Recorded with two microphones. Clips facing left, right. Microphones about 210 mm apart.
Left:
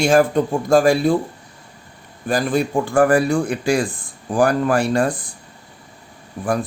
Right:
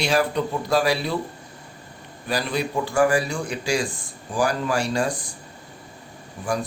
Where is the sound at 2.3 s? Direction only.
50° left (ahead or behind).